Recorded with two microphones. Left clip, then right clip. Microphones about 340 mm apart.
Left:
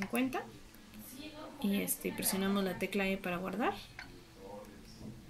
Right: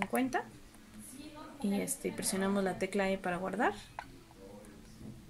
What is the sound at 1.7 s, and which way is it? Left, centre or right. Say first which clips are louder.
Speech: right 1 dB; right.